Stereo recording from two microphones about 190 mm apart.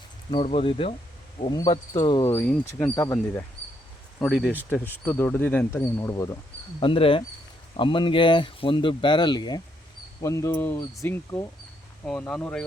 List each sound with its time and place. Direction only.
0.3 s speech: 30° left (ahead or behind)
2.3 s speech: 5° left (ahead or behind)
4.2 s speech: centre (ahead or behind)
4.5 s speech: 10° left (ahead or behind)
6.7 s speech: 25° left (ahead or behind); by 12.6 s 5° left (ahead or behind)